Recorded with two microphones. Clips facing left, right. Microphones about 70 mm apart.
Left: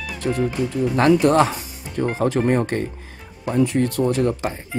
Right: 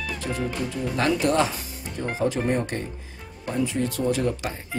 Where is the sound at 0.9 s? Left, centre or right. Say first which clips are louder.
Left 7 dB; left.